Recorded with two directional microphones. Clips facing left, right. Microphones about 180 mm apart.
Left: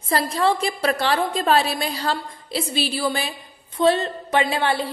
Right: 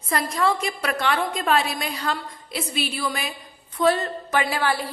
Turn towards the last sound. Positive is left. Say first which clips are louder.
# left 2 dB
turn(degrees=25)  # may be behind; listen again after turning